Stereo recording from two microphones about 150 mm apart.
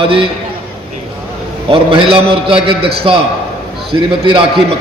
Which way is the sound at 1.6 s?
35° right (ahead or behind).